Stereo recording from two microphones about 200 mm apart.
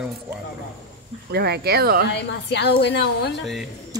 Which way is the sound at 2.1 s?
60° left (ahead or behind).